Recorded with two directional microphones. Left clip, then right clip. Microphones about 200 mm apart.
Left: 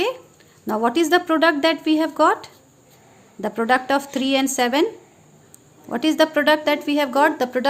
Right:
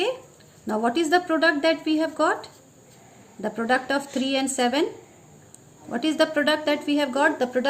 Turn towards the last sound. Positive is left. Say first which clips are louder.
# left 4 dB
turn(degrees=50)  # may be behind; listen again after turning